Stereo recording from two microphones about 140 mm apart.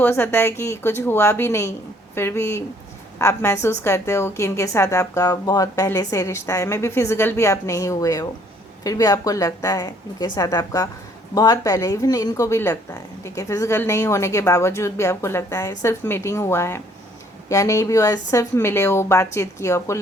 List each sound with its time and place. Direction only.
0.0 s a woman's voice: 15° left (ahead or behind)